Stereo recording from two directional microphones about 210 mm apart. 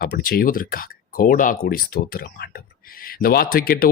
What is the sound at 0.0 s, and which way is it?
Speech, 45° left (ahead or behind).